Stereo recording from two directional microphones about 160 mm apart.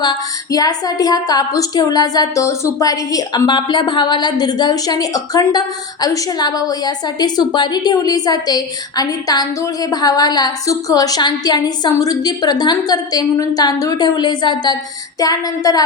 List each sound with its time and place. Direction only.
0.0 s a woman's voice: 25° left (ahead or behind)